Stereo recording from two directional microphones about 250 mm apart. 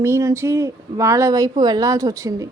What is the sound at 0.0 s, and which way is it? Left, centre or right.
A woman's voice, centre.